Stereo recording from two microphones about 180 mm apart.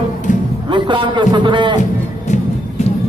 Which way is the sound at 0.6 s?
25° right (ahead or behind).